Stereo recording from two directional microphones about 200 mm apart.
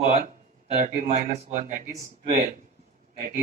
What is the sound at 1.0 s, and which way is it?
Speech, 35° right (ahead or behind).